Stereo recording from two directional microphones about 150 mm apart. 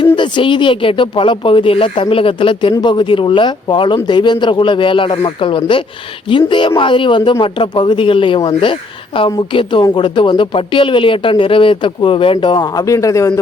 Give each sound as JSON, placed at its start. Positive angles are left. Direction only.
{"t": 0.0, "sound": "speech", "side_deg": 35}